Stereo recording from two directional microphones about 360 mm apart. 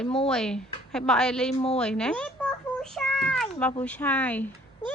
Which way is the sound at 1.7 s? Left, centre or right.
Centre.